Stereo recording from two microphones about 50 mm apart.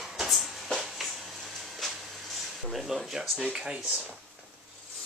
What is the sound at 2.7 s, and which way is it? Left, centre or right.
Speech, centre.